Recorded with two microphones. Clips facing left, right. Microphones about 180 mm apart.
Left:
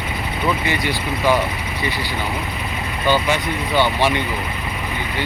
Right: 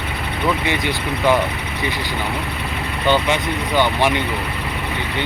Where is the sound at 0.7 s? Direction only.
20° right (ahead or behind).